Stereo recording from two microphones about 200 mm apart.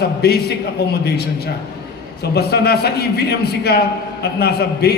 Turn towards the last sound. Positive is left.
turn(degrees=55)  # may be behind; listen again after turning